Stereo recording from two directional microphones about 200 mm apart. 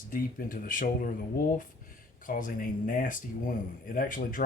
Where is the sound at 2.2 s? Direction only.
40° left (ahead or behind).